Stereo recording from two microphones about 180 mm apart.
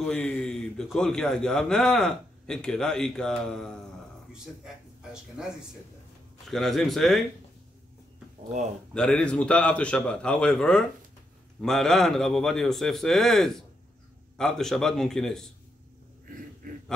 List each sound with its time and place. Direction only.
0.0 s a man's voice: 5° left (ahead or behind)
5.4 s a man's voice: 5° right (ahead or behind)
8.9 s a man's voice: 5° left (ahead or behind)
16.6 s a sound: 50° right (ahead or behind)